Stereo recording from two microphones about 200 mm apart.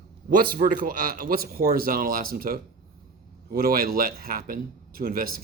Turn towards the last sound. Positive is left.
turn(degrees=-45)  # may be behind; listen again after turning